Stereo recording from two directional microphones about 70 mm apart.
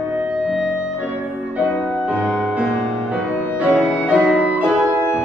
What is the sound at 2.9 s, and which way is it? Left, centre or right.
Music, centre.